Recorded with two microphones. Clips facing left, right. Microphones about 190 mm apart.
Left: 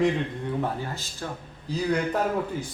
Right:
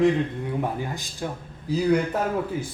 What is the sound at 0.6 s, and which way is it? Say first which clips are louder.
A man's voice: right 1 dB; 15° right (ahead or behind).